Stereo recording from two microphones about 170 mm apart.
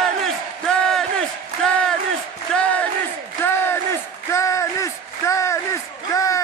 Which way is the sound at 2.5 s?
5° left (ahead or behind).